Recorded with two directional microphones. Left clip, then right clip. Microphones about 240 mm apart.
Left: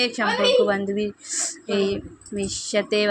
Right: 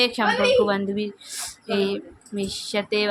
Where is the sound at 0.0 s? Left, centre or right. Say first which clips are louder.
Right 1 dB; centre.